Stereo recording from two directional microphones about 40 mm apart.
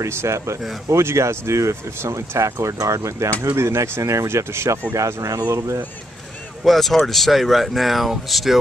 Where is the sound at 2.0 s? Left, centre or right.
Right.